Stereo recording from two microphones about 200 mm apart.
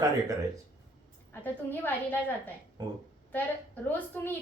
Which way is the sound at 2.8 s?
20° right (ahead or behind).